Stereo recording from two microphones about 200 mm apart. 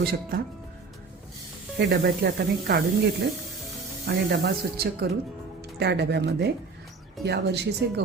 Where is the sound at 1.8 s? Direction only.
60° right (ahead or behind).